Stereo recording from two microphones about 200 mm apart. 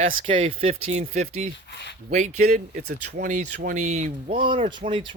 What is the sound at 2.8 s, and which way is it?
Speech, 45° right (ahead or behind).